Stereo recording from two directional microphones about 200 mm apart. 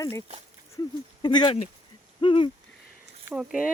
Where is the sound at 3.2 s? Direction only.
5° right (ahead or behind).